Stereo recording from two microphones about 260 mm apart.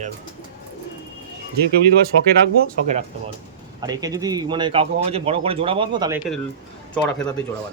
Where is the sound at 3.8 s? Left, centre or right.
Centre.